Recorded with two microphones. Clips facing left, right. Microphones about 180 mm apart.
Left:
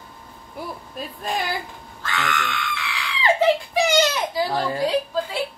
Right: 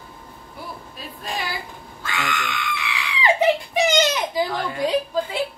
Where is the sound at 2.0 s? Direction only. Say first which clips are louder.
Left 1 dB; 10° right (ahead or behind).